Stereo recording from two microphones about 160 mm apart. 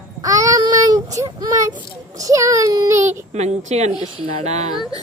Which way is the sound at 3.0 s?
45° right (ahead or behind).